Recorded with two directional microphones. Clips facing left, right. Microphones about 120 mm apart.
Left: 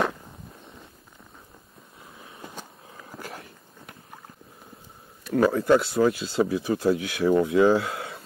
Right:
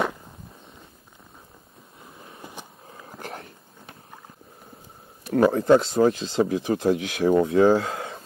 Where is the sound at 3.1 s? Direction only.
45° right (ahead or behind).